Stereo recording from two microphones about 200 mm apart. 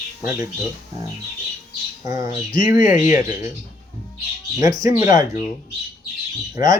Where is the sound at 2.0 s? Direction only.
15° right (ahead or behind).